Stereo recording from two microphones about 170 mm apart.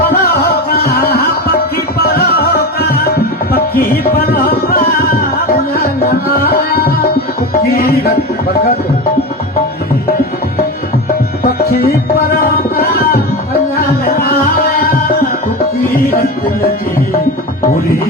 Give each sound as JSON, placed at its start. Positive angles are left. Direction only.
{"t": 0.2, "sound": "a sound", "side_deg": 65}
{"t": 2.0, "sound": "music", "side_deg": 65}
{"t": 3.5, "sound": "tabla", "side_deg": 60}
{"t": 11.1, "sound": "music", "side_deg": 65}
{"t": 12.3, "sound": "tabla", "side_deg": 60}